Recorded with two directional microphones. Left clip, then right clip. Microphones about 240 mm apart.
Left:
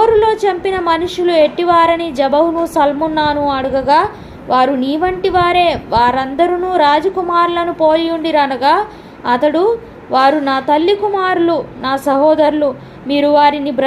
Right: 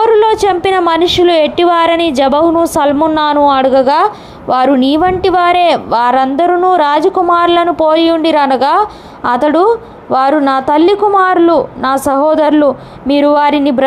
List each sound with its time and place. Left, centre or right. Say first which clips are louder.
0.0 s a woman's voice: right 3 dB; right